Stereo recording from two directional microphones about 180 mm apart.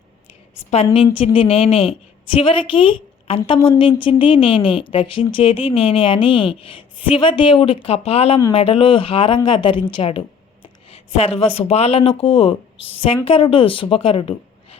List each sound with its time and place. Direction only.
0.9 s a woman's voice: 30° left (ahead or behind)